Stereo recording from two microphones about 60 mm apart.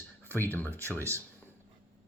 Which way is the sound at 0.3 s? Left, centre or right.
Left.